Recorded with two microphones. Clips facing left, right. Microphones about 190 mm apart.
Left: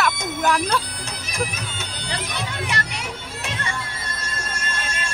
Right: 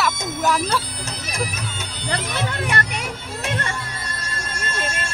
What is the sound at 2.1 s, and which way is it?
Speech, 55° right (ahead or behind).